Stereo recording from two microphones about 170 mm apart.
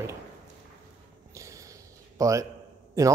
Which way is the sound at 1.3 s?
20° right (ahead or behind).